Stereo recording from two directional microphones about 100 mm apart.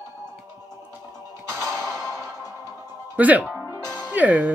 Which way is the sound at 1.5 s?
25° right (ahead or behind).